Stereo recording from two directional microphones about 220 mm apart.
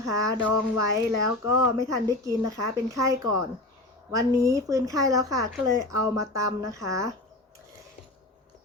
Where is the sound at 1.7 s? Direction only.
15° right (ahead or behind).